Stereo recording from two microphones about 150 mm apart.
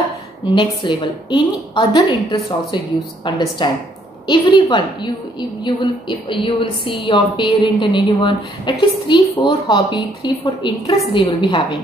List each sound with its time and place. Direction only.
0.6 s a woman's voice: 30° left (ahead or behind)
3.3 s a woman's voice: 30° left (ahead or behind)